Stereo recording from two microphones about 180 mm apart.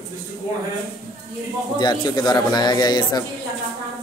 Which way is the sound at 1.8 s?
25° left (ahead or behind).